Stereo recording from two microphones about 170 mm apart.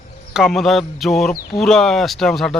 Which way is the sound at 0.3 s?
Centre (ahead or behind).